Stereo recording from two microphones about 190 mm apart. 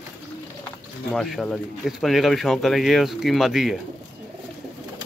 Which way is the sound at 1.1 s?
Centre (ahead or behind).